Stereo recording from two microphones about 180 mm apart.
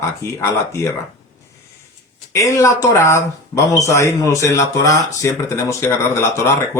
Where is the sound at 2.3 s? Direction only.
15° left (ahead or behind).